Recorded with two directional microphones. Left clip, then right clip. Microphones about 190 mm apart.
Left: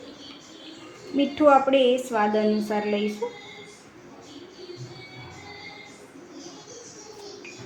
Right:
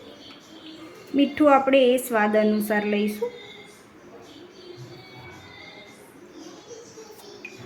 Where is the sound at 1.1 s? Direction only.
25° right (ahead or behind).